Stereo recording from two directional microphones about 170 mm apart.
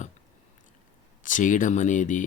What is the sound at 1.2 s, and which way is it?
Speech, 50° left (ahead or behind).